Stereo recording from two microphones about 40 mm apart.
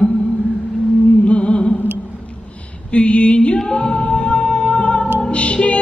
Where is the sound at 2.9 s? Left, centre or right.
Left.